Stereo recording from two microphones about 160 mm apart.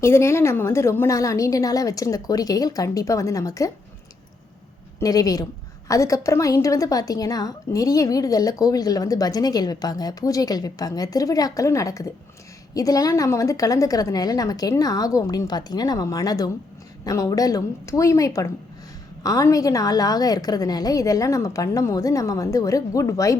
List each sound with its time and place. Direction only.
0.0 s a woman's voice: 15° left (ahead or behind)
4.9 s a woman's voice: 20° left (ahead or behind)